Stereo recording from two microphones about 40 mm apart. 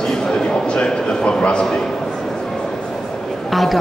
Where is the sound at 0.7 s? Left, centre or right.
Left.